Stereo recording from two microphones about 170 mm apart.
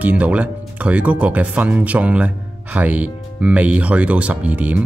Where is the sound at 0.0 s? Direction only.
10° right (ahead or behind).